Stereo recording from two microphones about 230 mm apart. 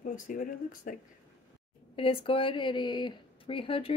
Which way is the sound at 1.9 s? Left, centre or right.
Left.